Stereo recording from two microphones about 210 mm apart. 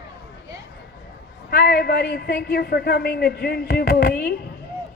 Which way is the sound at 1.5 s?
50° left (ahead or behind).